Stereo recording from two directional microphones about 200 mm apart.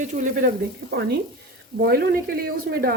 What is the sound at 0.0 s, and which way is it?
Speech, 35° right (ahead or behind).